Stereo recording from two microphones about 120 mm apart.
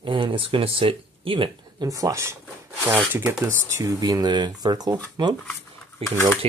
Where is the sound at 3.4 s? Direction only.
30° right (ahead or behind).